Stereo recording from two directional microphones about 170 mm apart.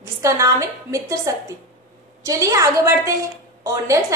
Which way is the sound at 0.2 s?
20° right (ahead or behind).